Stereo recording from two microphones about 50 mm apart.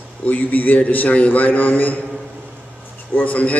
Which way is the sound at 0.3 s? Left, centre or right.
Left.